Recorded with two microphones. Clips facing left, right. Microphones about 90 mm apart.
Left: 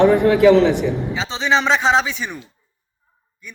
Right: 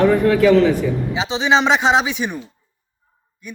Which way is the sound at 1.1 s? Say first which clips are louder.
Right 4 dB; 15° right (ahead or behind).